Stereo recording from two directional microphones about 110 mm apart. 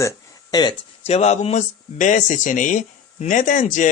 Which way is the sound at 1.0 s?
80° left.